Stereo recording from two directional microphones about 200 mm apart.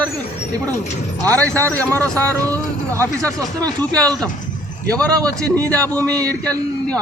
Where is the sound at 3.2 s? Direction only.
20° right (ahead or behind).